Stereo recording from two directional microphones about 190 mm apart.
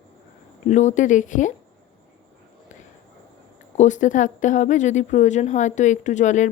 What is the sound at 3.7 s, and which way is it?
A woman's voice, 40° left (ahead or behind).